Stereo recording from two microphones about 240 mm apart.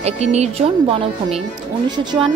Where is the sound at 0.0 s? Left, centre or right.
Right.